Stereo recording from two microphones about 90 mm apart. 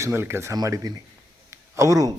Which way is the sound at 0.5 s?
40° right (ahead or behind).